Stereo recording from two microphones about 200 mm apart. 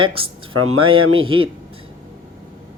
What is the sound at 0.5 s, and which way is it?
Speech, 90° right.